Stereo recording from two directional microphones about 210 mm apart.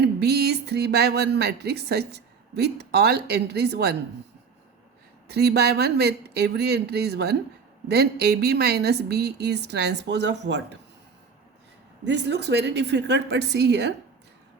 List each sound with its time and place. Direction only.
0.0 s speech: 50° right (ahead or behind)
5.3 s a woman's voice: 50° right (ahead or behind)
12.0 s a woman's voice: 55° right (ahead or behind)